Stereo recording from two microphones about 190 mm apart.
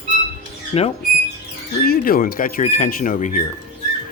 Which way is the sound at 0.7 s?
30° left (ahead or behind).